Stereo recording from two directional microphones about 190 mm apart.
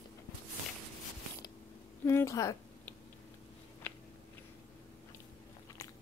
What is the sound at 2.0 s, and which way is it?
Speech, 15° left (ahead or behind).